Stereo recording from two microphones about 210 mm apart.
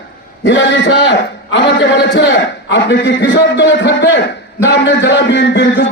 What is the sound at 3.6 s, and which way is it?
A man's voice, 55° left (ahead or behind).